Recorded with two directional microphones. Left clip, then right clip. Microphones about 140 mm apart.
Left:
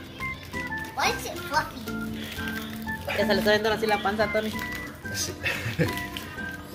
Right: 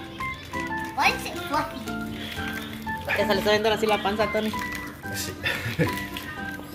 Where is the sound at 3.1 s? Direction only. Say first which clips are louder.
Even; centre (ahead or behind).